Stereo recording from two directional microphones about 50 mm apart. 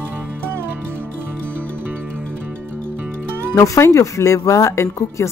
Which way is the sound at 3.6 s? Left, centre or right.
Left.